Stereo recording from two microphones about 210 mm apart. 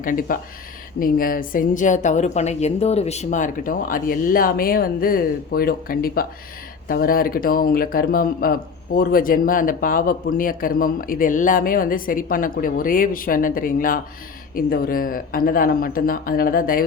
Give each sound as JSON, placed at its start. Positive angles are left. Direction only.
{"t": 0.0, "sound": "speech", "side_deg": 40}